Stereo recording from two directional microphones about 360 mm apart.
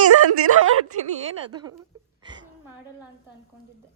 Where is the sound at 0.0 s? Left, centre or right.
Right.